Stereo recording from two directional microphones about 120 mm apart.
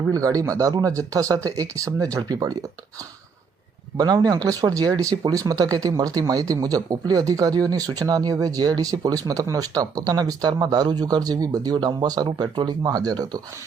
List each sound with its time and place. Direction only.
0.1 s speech: 30° right (ahead or behind)
3.9 s speech: 30° right (ahead or behind)